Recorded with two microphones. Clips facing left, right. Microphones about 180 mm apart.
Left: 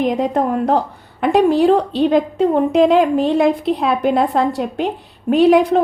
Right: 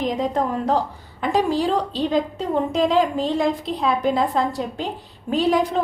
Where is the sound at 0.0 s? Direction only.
60° left (ahead or behind).